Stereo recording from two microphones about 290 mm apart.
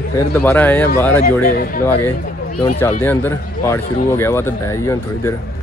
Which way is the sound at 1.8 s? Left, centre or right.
Centre.